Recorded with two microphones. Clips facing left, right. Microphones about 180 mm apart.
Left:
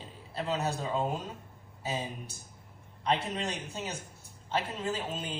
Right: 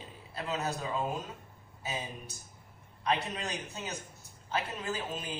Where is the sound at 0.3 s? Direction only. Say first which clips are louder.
Left 3 dB; 30° left (ahead or behind).